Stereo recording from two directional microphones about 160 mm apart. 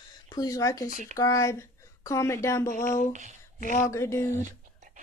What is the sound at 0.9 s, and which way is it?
Speech, 60° left (ahead or behind).